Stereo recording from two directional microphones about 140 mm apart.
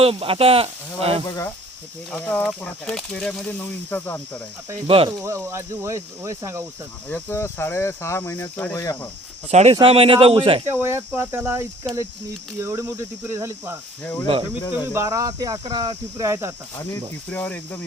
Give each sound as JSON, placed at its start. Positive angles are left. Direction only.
{"t": 0.0, "sound": "speech", "side_deg": -45}
{"t": 2.1, "sound": "speech", "side_deg": 10}
{"t": 4.9, "sound": "speech", "side_deg": -40}
{"t": 5.2, "sound": "speech", "side_deg": -20}
{"t": 7.1, "sound": "speech", "side_deg": 15}
{"t": 9.5, "sound": "speech", "side_deg": -50}
{"t": 9.7, "sound": "speech", "side_deg": -40}
{"t": 10.7, "sound": "speech", "side_deg": -15}
{"t": 14.0, "sound": "speech", "side_deg": 15}
{"t": 14.9, "sound": "speech", "side_deg": -25}
{"t": 17.2, "sound": "speech", "side_deg": 15}